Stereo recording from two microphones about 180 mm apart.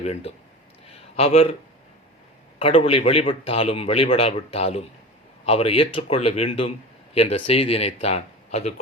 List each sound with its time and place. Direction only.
0.0 s a man's voice: 35° left (ahead or behind)
2.6 s a man's voice: 35° left (ahead or behind)